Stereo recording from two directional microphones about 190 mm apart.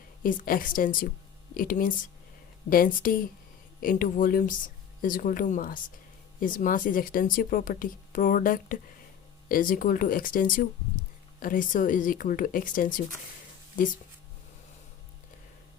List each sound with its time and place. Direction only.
0.2 s speech: 50° left (ahead or behind)